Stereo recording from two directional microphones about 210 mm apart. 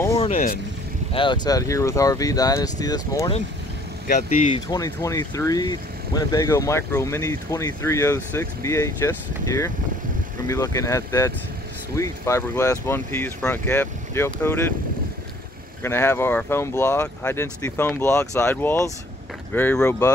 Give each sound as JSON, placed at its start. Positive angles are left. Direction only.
{"t": 0.2, "sound": "vehicle", "side_deg": 30}
{"t": 1.1, "sound": "speech", "side_deg": 20}
{"t": 15.8, "sound": "speech", "side_deg": 10}